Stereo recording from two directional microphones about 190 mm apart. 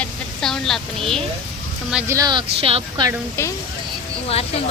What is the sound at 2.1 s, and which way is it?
Speech, 20° right (ahead or behind).